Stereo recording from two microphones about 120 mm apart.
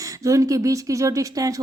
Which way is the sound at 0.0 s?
30° right (ahead or behind).